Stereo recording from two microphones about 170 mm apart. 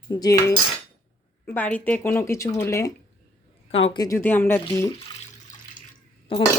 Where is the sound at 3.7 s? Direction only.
35° left (ahead or behind).